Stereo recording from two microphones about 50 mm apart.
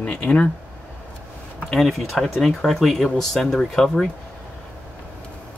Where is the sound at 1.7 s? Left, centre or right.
Centre.